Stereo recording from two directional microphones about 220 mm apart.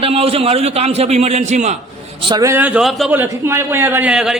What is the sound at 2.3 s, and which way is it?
A man's voice, 15° right (ahead or behind).